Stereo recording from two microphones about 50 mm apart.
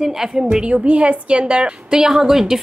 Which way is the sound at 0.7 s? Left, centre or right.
Right.